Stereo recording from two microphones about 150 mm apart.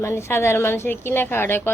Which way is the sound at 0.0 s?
15° left (ahead or behind).